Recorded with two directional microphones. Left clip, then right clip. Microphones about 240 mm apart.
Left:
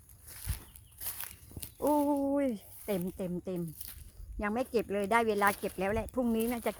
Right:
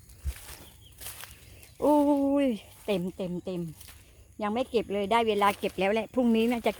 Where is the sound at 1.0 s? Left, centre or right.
Left.